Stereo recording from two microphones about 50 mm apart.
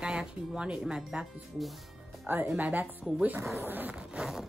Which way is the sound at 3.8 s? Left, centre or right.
Centre.